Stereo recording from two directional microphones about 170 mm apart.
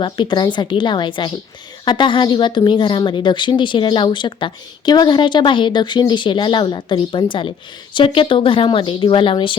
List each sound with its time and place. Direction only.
0.0 s speech: 30° left (ahead or behind)